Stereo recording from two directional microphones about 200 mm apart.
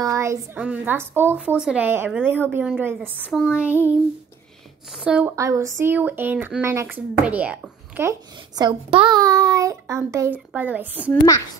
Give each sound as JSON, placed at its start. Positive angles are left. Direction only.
{"t": 0.0, "sound": "a sound", "side_deg": -15}
{"t": 0.6, "sound": "speech", "side_deg": -10}
{"t": 3.3, "sound": "a woman's voice", "side_deg": 5}
{"t": 4.9, "sound": "speech", "side_deg": -5}
{"t": 11.0, "sound": "a woman's voice", "side_deg": 15}